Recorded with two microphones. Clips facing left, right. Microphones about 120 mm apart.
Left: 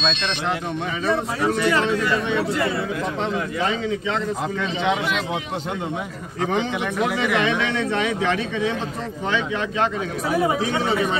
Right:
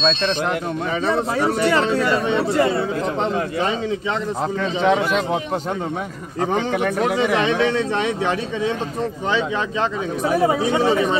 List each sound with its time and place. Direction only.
0.0 s speech: 35° right (ahead or behind)
6.4 s speech: 45° right (ahead or behind)
10.4 s speech: 35° right (ahead or behind)